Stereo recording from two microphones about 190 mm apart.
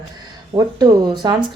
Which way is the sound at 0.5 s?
20° right (ahead or behind).